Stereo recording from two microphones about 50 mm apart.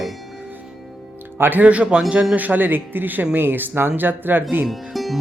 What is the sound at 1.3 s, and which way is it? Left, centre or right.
Speech, right.